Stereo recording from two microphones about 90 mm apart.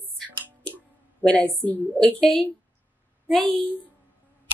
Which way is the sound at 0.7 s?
10° left (ahead or behind).